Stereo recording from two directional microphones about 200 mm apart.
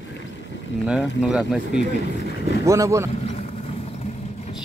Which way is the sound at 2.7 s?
15° right (ahead or behind).